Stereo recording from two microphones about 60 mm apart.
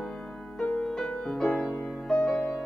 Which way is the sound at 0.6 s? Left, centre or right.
Centre.